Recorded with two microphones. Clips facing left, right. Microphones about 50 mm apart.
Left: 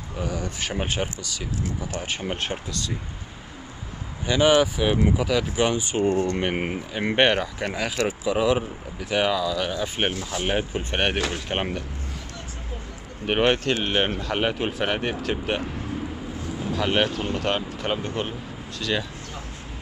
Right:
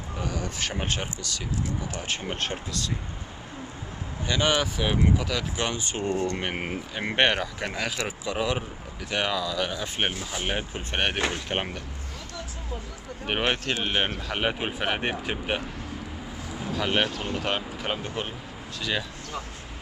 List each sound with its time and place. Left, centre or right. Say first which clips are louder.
0.2 s speech: left 2 dB; centre
4.3 s speech: left 6 dB; centre
13.3 s speech: left 5 dB; centre
14.5 s speech: left 3 dB; centre
16.6 s speech: left 3 dB; centre